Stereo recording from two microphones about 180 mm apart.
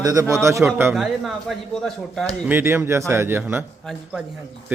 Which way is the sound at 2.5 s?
15° right (ahead or behind).